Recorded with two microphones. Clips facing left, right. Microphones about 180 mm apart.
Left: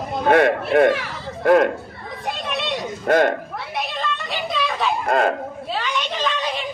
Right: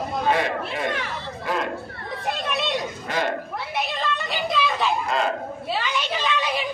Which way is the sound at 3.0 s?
55° left (ahead or behind).